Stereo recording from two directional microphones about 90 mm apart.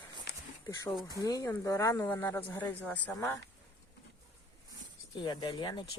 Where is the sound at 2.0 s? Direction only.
25° left (ahead or behind).